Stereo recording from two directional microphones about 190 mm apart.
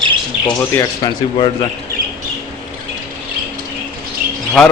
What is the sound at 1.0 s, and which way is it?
Speech, 20° left (ahead or behind).